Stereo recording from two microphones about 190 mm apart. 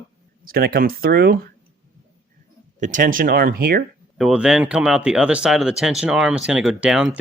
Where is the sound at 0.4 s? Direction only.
50° right (ahead or behind).